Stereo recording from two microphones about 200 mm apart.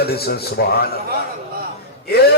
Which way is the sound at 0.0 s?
50° left (ahead or behind).